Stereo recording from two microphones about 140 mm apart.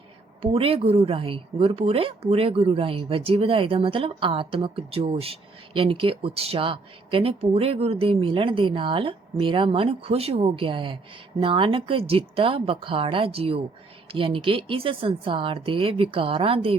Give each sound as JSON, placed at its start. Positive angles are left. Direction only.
{"t": 0.5, "sound": "a woman's voice", "side_deg": -45}